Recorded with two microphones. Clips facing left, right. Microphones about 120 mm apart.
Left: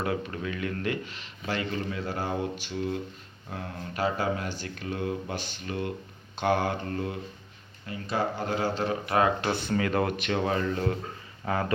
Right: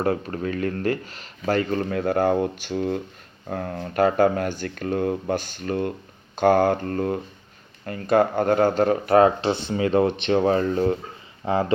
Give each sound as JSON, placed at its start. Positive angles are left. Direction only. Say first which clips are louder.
{"t": 0.0, "sound": "speech", "louder": "right 6 dB", "side_deg": -40}
{"t": 9.4, "sound": "speech", "louder": "right 5 dB", "side_deg": -20}